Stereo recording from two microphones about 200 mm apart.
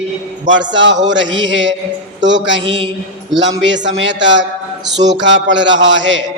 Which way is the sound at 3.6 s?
65° right (ahead or behind).